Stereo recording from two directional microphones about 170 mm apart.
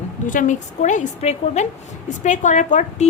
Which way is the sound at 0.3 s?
50° left (ahead or behind).